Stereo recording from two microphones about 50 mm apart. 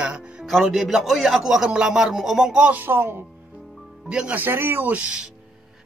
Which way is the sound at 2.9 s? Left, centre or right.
Right.